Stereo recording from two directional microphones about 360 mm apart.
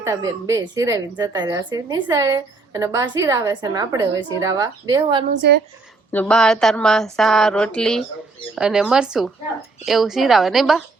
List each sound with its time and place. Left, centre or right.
0.0 s speech: centre
5.3 s speech: right
6.1 s speech: centre